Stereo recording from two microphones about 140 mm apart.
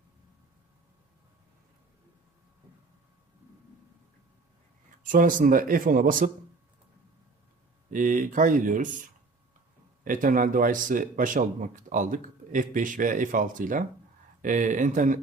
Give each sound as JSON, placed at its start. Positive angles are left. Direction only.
{"t": 5.0, "sound": "speech", "side_deg": -75}
{"t": 7.9, "sound": "speech", "side_deg": -70}